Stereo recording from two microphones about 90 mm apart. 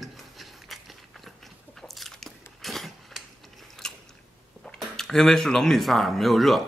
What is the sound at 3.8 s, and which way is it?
Biting, 5° left (ahead or behind).